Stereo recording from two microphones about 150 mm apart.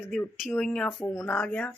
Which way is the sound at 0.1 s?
Centre (ahead or behind).